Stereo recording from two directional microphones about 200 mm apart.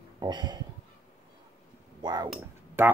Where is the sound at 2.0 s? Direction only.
20° right (ahead or behind).